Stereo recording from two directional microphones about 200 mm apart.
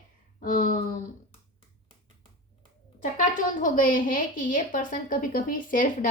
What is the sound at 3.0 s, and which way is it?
A woman's voice, 40° left (ahead or behind).